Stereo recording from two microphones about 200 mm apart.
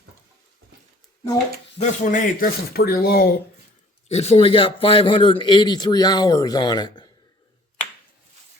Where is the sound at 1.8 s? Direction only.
40° left (ahead or behind).